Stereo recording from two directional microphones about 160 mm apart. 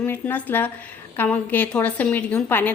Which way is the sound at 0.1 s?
10° left (ahead or behind).